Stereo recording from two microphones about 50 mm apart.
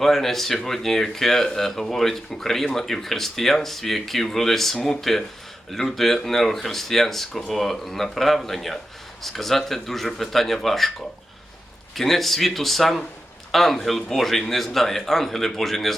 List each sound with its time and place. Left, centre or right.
0.0 s speech: centre
11.9 s speech: centre